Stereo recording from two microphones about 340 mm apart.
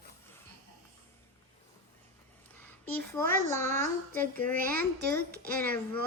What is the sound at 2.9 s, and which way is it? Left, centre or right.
Speech, centre.